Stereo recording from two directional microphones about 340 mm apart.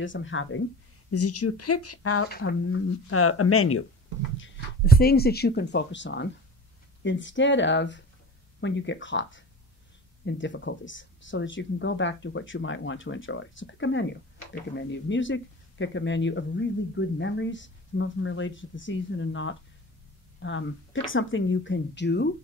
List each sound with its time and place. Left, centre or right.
0.0 s speech: left
2.2 s speech: left
2.6 s speech: left